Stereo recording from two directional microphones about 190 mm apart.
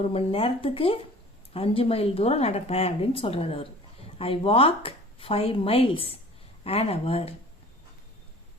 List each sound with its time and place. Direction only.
0.0 s a woman's voice: 30° left (ahead or behind)